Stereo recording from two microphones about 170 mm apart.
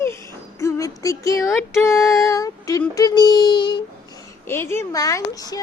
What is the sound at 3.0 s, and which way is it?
A child's voice, 20° left (ahead or behind).